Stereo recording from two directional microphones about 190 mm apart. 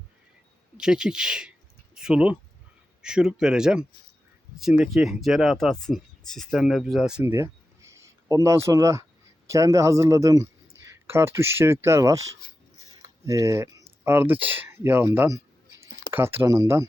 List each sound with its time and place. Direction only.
0.8 s speech: 5° right (ahead or behind)
7.3 s speech: 15° right (ahead or behind)
13.2 s speech: 15° right (ahead or behind)